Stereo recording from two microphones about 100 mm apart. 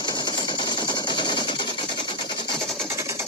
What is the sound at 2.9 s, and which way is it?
Sewing machine, 30° right (ahead or behind).